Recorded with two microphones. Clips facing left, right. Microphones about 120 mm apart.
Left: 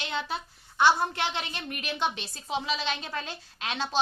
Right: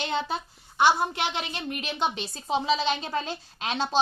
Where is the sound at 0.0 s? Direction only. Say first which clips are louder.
Right 4 dB; 35° right (ahead or behind).